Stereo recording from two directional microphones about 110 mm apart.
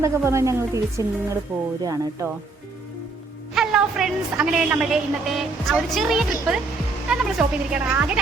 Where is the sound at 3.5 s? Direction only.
5° right (ahead or behind).